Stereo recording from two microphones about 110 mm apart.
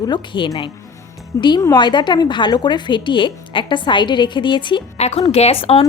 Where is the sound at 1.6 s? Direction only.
40° left (ahead or behind).